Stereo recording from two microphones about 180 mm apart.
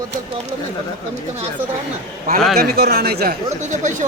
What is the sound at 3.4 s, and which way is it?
Speech, 40° right (ahead or behind).